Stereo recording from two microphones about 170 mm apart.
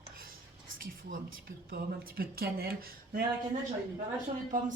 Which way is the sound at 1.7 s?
60° right (ahead or behind).